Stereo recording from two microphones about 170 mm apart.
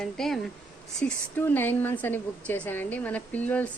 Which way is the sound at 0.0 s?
5° left (ahead or behind).